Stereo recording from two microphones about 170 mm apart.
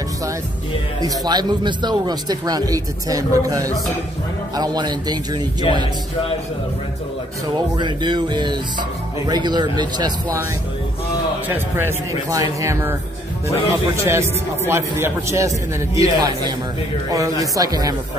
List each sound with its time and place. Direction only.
1.0 s speech: 25° right (ahead or behind)
7.5 s speech: 25° right (ahead or behind)
11.4 s a man's voice: 15° right (ahead or behind)
14.0 s a man's voice: 15° right (ahead or behind)